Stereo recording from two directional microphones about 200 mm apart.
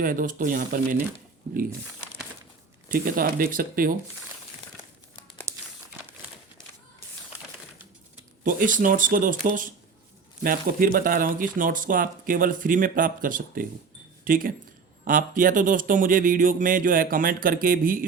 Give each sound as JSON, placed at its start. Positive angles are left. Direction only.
{"t": 0.0, "sound": "speech", "side_deg": -45}
{"t": 2.9, "sound": "speech", "side_deg": -45}
{"t": 5.5, "sound": "crumpling", "side_deg": -15}
{"t": 8.4, "sound": "speech", "side_deg": -40}